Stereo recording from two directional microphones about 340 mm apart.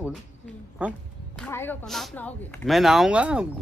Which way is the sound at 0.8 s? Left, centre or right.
Centre.